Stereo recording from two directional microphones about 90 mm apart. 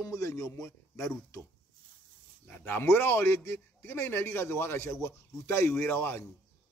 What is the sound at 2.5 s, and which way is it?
A man's voice, 20° left (ahead or behind).